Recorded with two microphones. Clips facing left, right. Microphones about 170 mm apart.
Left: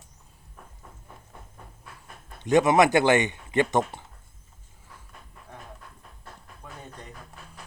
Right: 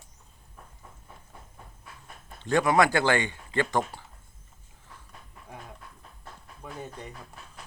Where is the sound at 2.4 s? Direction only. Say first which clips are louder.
Left 3 dB; 20° left (ahead or behind).